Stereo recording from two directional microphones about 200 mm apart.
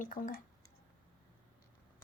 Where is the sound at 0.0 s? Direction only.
45° left (ahead or behind).